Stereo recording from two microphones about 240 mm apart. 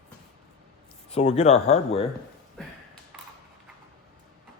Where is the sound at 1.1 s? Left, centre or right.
Left.